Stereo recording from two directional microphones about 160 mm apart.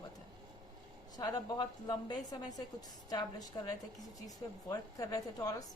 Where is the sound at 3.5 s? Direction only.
25° left (ahead or behind).